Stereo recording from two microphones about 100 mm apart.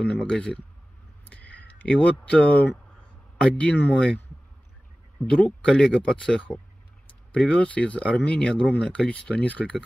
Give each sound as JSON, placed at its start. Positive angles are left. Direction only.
{"t": 0.0, "sound": "speech", "side_deg": 10}
{"t": 5.2, "sound": "speech", "side_deg": 10}